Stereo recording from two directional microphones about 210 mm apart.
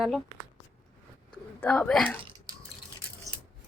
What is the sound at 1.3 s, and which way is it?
Speech, 5° left (ahead or behind).